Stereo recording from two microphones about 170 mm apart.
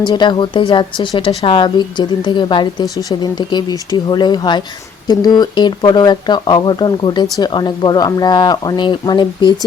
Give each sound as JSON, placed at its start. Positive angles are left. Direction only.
{"t": 0.0, "sound": "speech", "side_deg": 25}